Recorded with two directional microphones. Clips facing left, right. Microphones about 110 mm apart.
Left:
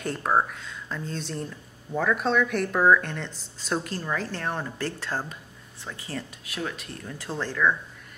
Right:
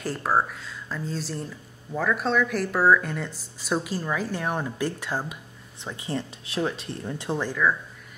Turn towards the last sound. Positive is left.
turn(degrees=-15)  # may be behind; listen again after turning